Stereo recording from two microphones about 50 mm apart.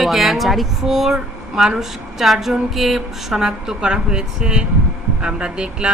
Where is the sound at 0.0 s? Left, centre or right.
Centre.